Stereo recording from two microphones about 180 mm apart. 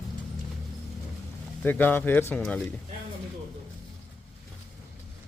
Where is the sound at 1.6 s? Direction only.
10° left (ahead or behind).